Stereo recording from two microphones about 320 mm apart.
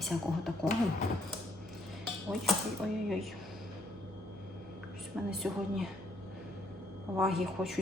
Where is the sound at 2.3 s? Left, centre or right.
Centre.